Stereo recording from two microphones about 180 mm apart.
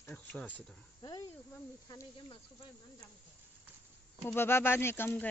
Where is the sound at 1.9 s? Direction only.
20° left (ahead or behind).